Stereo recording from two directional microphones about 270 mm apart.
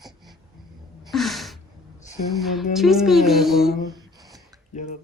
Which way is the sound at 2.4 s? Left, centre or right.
Centre.